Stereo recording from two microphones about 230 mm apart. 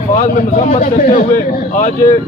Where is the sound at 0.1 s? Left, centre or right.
Left.